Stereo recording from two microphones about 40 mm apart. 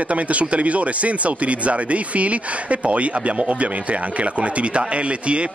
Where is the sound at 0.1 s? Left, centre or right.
Right.